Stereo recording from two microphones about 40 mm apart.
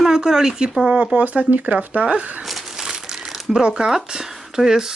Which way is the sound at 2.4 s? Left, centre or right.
Centre.